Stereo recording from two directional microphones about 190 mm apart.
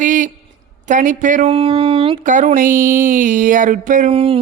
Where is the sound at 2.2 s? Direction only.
40° right (ahead or behind).